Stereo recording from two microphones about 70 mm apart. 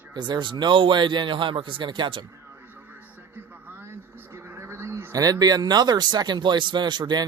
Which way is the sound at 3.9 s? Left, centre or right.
Right.